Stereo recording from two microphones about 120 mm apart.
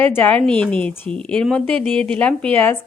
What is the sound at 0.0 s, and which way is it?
Speech, 15° left (ahead or behind).